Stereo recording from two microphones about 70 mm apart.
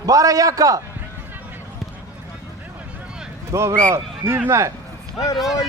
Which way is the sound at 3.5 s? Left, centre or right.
Right.